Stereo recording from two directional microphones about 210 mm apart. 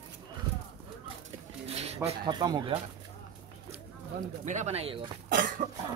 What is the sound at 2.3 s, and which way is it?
Speech, 20° right (ahead or behind).